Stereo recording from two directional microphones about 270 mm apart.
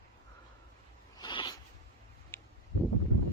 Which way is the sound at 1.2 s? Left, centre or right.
Centre.